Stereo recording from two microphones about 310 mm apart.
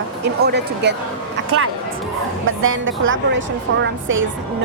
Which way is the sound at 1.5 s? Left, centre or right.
Right.